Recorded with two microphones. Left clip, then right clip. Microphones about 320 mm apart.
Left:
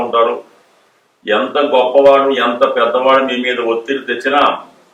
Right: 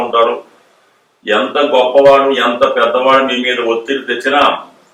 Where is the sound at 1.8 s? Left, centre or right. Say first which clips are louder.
Right 1 dB; left.